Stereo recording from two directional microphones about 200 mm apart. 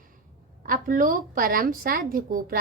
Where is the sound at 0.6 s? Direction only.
45° right (ahead or behind).